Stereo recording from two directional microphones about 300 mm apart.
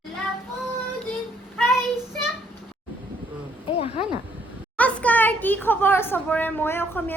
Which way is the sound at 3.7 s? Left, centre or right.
Centre.